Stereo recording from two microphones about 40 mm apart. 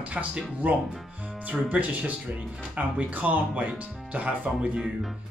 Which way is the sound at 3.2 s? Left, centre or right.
Right.